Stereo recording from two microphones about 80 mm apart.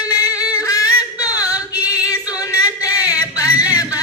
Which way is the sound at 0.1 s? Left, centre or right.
Left.